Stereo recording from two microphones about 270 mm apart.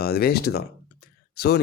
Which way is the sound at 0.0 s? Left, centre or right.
Left.